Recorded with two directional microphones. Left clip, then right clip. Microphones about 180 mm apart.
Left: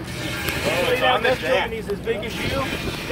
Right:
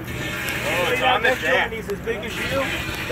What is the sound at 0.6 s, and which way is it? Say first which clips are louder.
Speech: left 1 dB; 70° left (ahead or behind).